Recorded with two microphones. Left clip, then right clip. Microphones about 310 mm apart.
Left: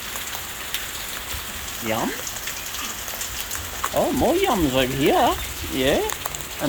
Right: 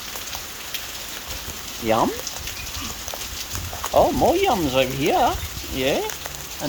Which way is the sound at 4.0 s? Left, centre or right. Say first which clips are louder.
Right 3 dB; centre.